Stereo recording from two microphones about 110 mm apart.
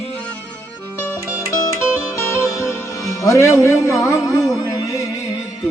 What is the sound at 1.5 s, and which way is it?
Music, 35° left (ahead or behind).